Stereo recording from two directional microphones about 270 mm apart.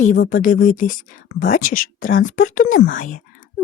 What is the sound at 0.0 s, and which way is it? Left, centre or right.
Speech, left.